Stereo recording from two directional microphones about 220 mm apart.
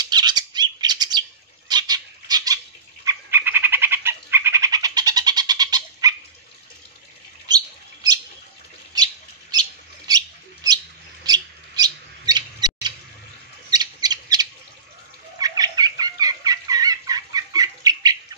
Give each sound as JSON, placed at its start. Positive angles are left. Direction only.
{"t": 0.0, "sound": "bird", "side_deg": -20}
{"t": 1.7, "sound": "a sound", "side_deg": -20}
{"t": 3.1, "sound": "bird", "side_deg": -10}
{"t": 7.4, "sound": "bird", "side_deg": -15}
{"t": 11.2, "sound": "owl", "side_deg": -15}
{"t": 15.3, "sound": "a sound", "side_deg": -15}